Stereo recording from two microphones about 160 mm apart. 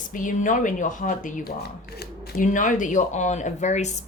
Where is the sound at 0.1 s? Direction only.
55° left (ahead or behind).